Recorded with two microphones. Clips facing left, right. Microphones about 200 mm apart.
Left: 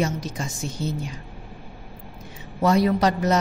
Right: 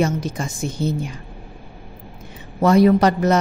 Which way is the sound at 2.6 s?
55° right (ahead or behind).